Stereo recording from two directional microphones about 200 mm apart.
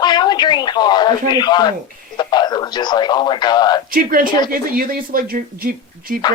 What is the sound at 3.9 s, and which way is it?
Speech, 45° right (ahead or behind).